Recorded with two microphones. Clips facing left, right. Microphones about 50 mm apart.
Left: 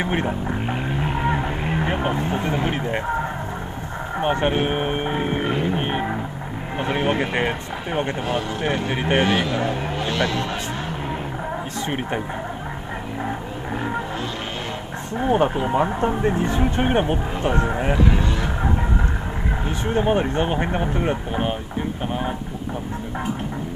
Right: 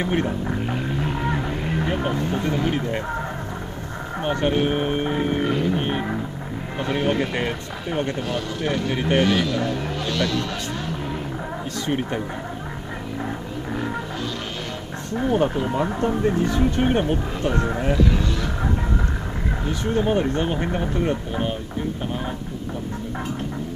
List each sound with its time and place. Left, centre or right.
0.0 s speech: left
15.1 s speech: left
19.8 s speech: left